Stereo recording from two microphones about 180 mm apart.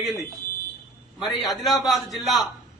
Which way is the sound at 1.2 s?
Centre (ahead or behind).